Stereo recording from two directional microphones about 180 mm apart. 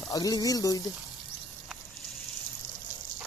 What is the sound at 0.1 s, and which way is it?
Speech, 20° left (ahead or behind).